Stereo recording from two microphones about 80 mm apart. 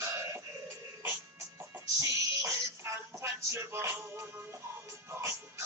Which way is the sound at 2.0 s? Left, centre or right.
Right.